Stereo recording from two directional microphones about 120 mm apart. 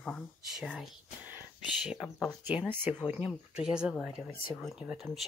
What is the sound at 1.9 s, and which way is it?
Speech, centre (ahead or behind).